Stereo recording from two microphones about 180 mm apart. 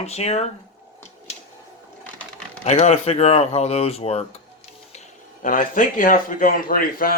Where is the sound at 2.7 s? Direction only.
40° left (ahead or behind).